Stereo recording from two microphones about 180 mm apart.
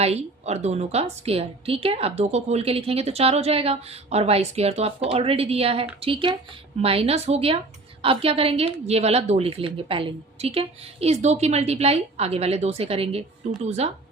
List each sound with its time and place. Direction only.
0.0 s a woman's voice: 35° right (ahead or behind)